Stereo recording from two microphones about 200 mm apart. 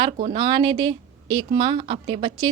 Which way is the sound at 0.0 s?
25° right (ahead or behind).